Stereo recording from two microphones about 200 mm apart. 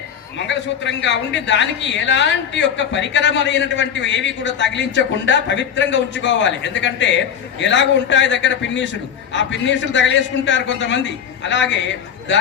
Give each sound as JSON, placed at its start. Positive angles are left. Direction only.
{"t": 0.3, "sound": "a man's voice", "side_deg": 65}